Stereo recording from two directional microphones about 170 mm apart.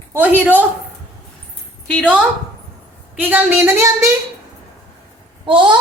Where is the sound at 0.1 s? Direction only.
10° right (ahead or behind).